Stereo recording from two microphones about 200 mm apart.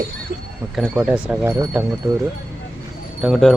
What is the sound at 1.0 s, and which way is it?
Speech, 5° right (ahead or behind).